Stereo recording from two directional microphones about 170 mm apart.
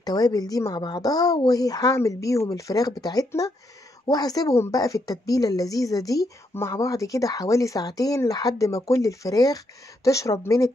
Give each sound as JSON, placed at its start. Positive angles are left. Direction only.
{"t": 0.0, "sound": "speech", "side_deg": 20}